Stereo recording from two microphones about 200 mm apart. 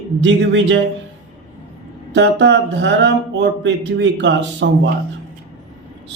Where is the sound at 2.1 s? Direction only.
60° right (ahead or behind).